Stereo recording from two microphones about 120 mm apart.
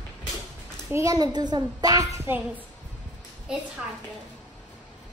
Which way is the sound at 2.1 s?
20° right (ahead or behind).